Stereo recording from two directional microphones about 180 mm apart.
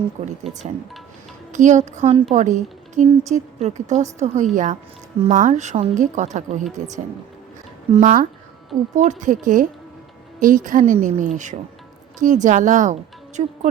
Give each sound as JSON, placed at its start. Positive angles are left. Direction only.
{"t": 1.5, "sound": "a woman's voice", "side_deg": -45}
{"t": 8.0, "sound": "speech", "side_deg": -50}